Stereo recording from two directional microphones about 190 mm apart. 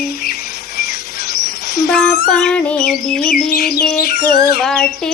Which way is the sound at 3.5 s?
55° left (ahead or behind).